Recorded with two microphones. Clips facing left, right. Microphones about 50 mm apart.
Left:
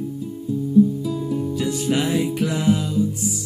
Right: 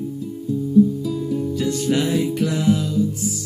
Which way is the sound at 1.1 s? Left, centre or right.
Centre.